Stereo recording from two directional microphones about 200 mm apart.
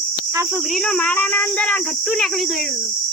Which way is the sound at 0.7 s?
5° left (ahead or behind).